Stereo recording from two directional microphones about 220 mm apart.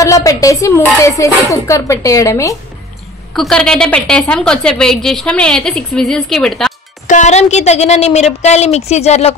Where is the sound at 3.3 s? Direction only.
Centre (ahead or behind).